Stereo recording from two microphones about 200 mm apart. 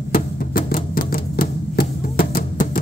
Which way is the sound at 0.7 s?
45° left (ahead or behind).